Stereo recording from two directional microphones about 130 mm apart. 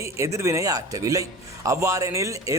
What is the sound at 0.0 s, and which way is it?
Speech, 20° right (ahead or behind).